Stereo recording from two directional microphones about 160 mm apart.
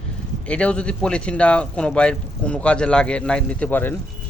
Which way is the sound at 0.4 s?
5° left (ahead or behind).